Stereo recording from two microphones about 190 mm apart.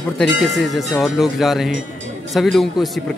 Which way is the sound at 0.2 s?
Centre (ahead or behind).